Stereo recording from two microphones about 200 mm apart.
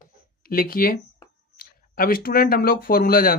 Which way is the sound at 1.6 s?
45° left (ahead or behind).